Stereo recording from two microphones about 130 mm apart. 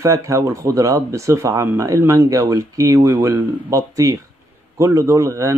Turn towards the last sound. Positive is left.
turn(degrees=-20)  # may be behind; listen again after turning